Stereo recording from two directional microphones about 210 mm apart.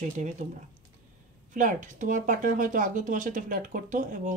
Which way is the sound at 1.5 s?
40° right (ahead or behind).